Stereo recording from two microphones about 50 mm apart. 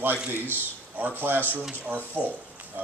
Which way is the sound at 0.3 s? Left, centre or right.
Right.